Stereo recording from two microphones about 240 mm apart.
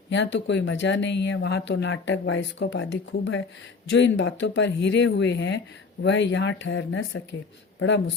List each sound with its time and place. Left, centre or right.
0.1 s speech: left